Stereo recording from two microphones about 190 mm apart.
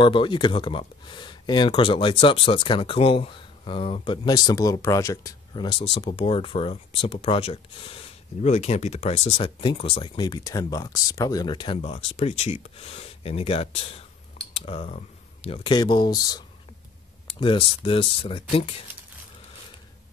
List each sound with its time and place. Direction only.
0.0 s speech: 25° left (ahead or behind)